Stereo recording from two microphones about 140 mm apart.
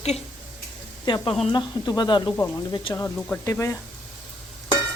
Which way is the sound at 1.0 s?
30° left (ahead or behind).